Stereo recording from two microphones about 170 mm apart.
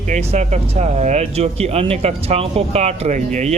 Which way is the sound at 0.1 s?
40° right (ahead or behind).